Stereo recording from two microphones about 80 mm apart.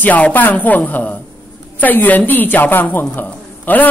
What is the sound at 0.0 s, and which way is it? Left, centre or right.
A woman's voice, centre.